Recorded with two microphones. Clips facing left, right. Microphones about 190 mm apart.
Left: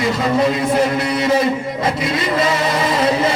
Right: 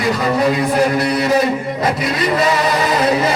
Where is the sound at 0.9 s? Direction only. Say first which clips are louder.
Right 2 dB; 25° left (ahead or behind).